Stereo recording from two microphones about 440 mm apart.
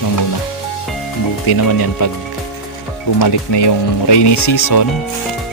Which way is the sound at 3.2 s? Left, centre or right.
Left.